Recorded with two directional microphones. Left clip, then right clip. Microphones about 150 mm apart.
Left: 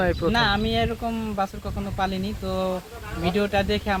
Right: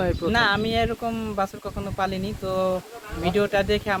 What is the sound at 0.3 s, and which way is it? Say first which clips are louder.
Speech: right 4 dB; 40° right (ahead or behind).